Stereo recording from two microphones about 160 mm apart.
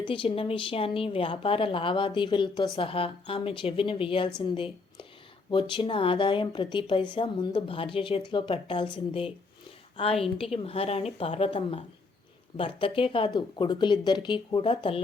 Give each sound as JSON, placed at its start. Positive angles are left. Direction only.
{"t": 0.0, "sound": "a woman's voice", "side_deg": 35}